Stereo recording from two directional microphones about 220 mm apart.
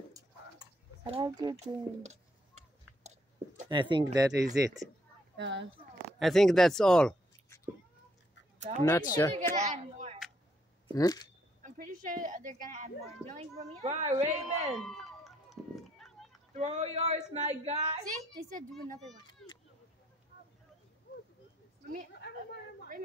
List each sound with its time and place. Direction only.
0.1 s a sound: 20° right (ahead or behind)
1.6 s a sound: 30° right (ahead or behind)
3.6 s speech: 20° right (ahead or behind)
5.4 s speech: 55° right (ahead or behind)
6.1 s speech: centre (ahead or behind)
8.5 s speech: 35° right (ahead or behind)
8.8 s speech: 15° left (ahead or behind)
9.6 s a sound: 30° right (ahead or behind)
11.0 s speech: 15° left (ahead or behind)
11.6 s a woman's voice: 35° right (ahead or behind)
14.7 s run: centre (ahead or behind)
16.5 s speech: 30° right (ahead or behind)
19.2 s speech: 20° left (ahead or behind)